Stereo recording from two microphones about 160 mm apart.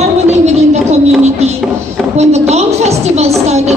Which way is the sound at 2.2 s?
45° right (ahead or behind).